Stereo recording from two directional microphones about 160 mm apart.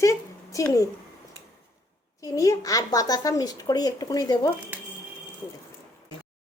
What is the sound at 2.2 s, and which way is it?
Speech, 20° left (ahead or behind).